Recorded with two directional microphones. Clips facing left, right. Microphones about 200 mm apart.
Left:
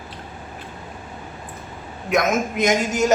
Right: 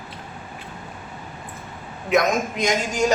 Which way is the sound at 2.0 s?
Centre (ahead or behind).